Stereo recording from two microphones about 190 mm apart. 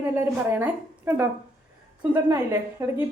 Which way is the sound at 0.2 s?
10° right (ahead or behind).